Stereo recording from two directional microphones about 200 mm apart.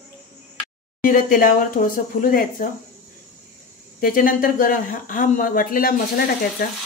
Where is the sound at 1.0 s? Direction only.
45° left (ahead or behind).